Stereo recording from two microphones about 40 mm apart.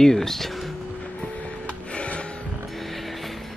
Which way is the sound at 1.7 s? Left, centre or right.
Left.